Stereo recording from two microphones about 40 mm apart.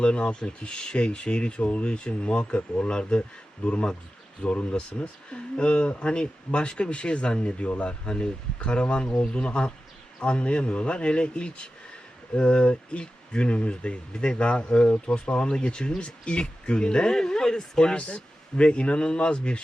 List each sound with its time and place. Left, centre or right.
0.0 s speech: left